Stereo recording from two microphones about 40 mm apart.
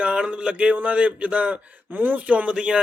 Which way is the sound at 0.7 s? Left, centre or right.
Right.